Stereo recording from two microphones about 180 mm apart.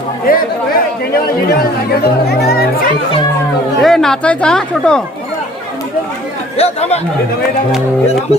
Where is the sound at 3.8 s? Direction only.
Centre (ahead or behind).